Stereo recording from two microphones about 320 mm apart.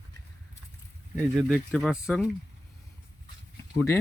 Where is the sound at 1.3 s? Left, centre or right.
Centre.